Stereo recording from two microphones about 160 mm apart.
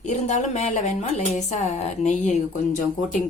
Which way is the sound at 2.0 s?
45° left (ahead or behind).